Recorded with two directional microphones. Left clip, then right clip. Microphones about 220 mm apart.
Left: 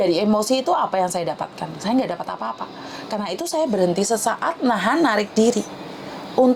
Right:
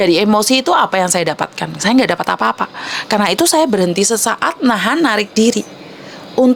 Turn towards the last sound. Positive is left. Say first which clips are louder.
# right 4 dB
turn(degrees=-30)  # may be behind; listen again after turning